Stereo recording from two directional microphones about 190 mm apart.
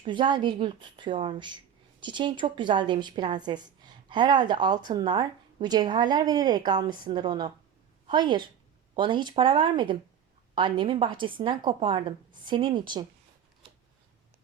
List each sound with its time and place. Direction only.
0.0 s a woman's voice: 25° right (ahead or behind)